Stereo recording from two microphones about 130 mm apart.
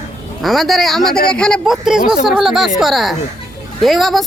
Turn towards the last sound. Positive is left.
turn(degrees=0)  # may be behind; listen again after turning